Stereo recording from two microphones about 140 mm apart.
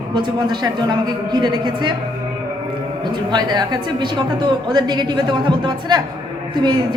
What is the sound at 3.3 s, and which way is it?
A woman's voice, 30° right (ahead or behind).